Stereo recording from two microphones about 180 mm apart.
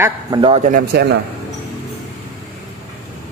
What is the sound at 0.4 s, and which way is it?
Speech, 30° right (ahead or behind).